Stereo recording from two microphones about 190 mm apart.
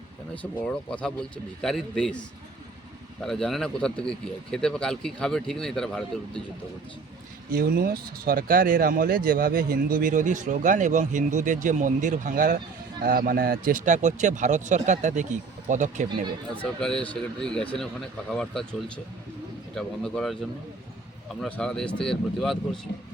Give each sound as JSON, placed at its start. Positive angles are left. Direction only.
{"t": 0.6, "sound": "speech", "side_deg": 5}
{"t": 3.2, "sound": "speech", "side_deg": 0}
{"t": 7.5, "sound": "speech", "side_deg": -50}
{"t": 16.8, "sound": "speech", "side_deg": 5}
{"t": 21.4, "sound": "speech", "side_deg": 5}